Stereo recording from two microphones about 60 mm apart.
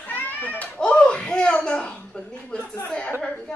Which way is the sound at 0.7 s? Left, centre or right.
Centre.